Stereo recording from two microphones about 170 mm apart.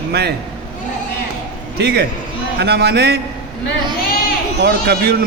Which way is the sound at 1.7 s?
70° right (ahead or behind).